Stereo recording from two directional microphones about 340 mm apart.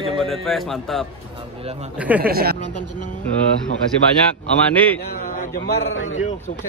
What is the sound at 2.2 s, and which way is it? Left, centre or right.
Speech, right.